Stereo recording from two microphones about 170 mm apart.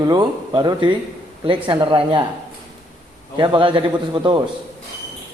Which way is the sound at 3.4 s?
30° right (ahead or behind).